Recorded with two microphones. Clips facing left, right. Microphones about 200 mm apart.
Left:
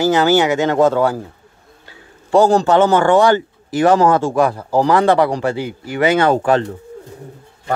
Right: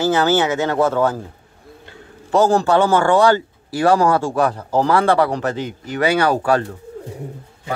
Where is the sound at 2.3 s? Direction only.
15° left (ahead or behind).